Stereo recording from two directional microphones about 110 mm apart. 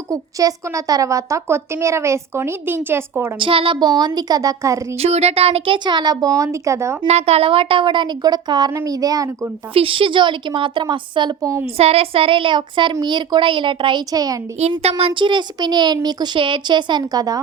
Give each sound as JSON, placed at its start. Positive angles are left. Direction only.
{"t": 0.1, "sound": "a woman's voice", "side_deg": -30}
{"t": 3.3, "sound": "a child's voice", "side_deg": -55}
{"t": 3.8, "sound": "speech", "side_deg": -40}
{"t": 4.9, "sound": "speech", "side_deg": -75}
{"t": 7.1, "sound": "a child's voice", "side_deg": -70}
{"t": 9.7, "sound": "a child's voice", "side_deg": -55}
{"t": 11.8, "sound": "a child's voice", "side_deg": -60}
{"t": 14.1, "sound": "speech", "side_deg": -35}
{"t": 14.8, "sound": "a child's voice", "side_deg": -65}